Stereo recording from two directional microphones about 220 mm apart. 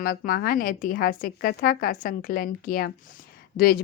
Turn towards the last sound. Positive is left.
turn(degrees=40)  # may be behind; listen again after turning